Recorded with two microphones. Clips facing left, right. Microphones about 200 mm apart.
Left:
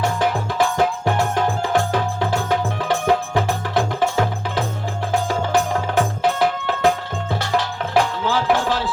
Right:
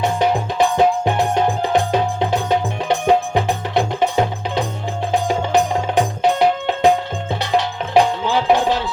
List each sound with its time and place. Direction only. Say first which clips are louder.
0.0 s music: right 3 dB; 20° right (ahead or behind)
7.9 s music: right 4 dB; 20° right (ahead or behind)